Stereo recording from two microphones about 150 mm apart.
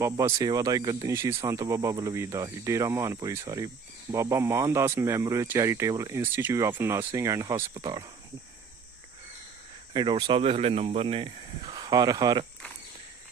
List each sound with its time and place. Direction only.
0.0 s speech: 20° right (ahead or behind)
9.9 s speech: 30° right (ahead or behind)